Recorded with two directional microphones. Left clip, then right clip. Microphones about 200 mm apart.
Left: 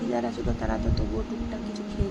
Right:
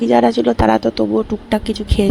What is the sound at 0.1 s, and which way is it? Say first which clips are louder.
Speech: right 18 dB; 45° right (ahead or behind).